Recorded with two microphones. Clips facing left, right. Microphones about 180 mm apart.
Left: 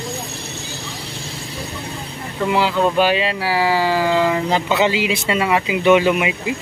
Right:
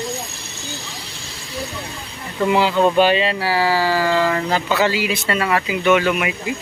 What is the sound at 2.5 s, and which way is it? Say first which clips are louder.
Speech: right 1 dB; centre (ahead or behind).